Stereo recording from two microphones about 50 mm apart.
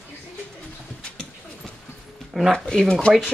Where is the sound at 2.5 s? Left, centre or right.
Centre.